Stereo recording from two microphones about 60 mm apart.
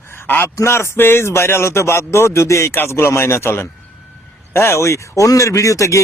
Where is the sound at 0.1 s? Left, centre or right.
Left.